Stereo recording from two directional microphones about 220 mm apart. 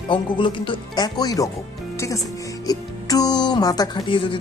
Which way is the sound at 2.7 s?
15° left (ahead or behind).